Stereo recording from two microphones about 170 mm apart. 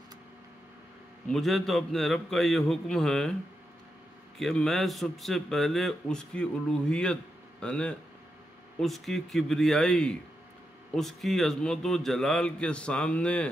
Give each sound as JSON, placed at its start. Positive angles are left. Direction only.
{"t": 1.3, "sound": "a man's voice", "side_deg": 0}
{"t": 4.4, "sound": "a man's voice", "side_deg": 5}